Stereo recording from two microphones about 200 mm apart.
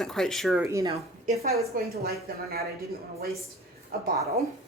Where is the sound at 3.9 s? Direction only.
50° right (ahead or behind).